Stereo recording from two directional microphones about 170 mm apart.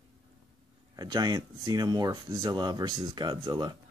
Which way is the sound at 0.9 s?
25° right (ahead or behind).